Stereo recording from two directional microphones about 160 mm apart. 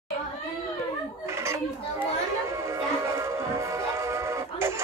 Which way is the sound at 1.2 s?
15° right (ahead or behind).